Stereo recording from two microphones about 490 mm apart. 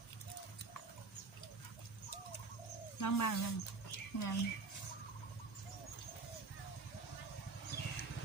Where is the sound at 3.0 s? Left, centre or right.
Left.